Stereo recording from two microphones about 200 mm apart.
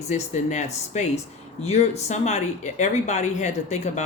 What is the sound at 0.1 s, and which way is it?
Speech, 35° left (ahead or behind).